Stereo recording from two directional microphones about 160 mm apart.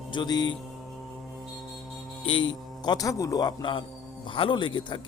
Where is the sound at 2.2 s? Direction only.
30° left (ahead or behind).